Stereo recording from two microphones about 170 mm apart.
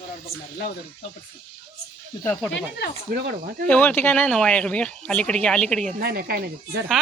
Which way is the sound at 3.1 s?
65° right (ahead or behind).